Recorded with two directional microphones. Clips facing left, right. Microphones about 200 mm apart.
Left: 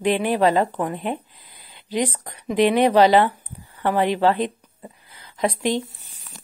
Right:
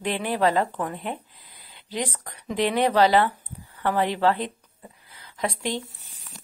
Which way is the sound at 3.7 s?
15° left (ahead or behind).